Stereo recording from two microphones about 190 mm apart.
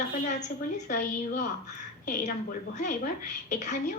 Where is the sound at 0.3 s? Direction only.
40° left (ahead or behind).